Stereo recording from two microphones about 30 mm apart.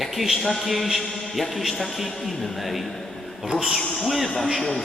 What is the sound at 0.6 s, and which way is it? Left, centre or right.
A man's voice, centre.